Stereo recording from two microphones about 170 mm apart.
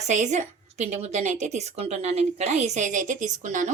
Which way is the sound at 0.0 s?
45° right (ahead or behind).